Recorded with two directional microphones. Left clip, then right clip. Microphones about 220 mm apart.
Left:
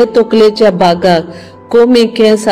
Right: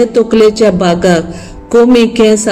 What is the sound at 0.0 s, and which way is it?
A man's voice, 10° left (ahead or behind).